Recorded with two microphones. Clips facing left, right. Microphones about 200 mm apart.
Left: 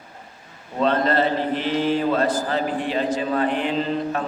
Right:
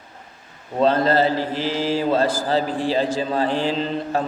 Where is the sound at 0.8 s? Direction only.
30° right (ahead or behind).